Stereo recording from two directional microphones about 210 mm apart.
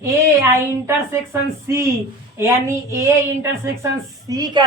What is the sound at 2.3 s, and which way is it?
A woman's voice, 15° right (ahead or behind).